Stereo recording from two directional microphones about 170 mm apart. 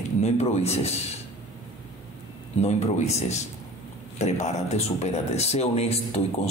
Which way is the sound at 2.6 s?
40° left (ahead or behind).